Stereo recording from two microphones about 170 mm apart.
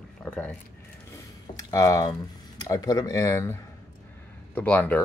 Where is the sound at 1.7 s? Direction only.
20° left (ahead or behind).